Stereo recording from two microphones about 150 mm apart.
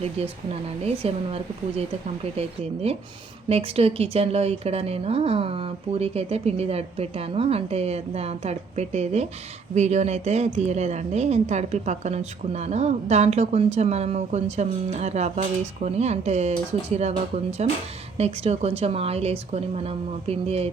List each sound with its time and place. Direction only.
0.9 s a woman's voice: 45° right (ahead or behind)